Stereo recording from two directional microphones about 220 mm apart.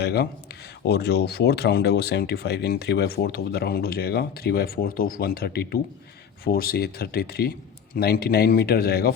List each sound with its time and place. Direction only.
0.0 s speech: 45° left (ahead or behind)